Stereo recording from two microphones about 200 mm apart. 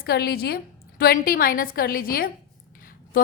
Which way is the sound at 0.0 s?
50° left (ahead or behind).